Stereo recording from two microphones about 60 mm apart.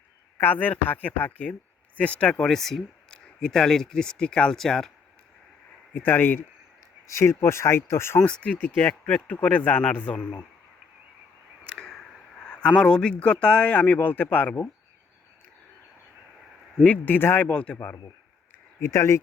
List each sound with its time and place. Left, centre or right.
0.3 s speech: left
2.4 s speech: centre
5.9 s speech: left
7.1 s speech: left
8.2 s speech: centre
11.8 s speech: centre; by 14.5 s left
16.8 s speech: left
18.8 s speech: left